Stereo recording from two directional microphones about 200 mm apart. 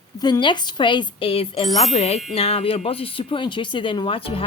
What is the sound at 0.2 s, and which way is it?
Speech, 20° left (ahead or behind).